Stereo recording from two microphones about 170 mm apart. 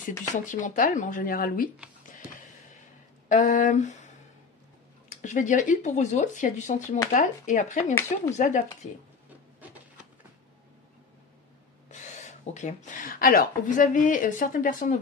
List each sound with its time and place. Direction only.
0.3 s speech: 45° left (ahead or behind)
3.3 s speech: 50° left (ahead or behind)
5.2 s speech: 50° left (ahead or behind)
11.9 s speech: 45° left (ahead or behind)